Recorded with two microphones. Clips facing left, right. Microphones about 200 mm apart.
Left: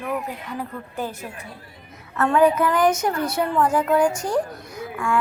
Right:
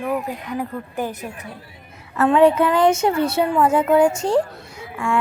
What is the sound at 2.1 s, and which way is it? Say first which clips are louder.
A woman's voice: right 3 dB; 25° right (ahead or behind).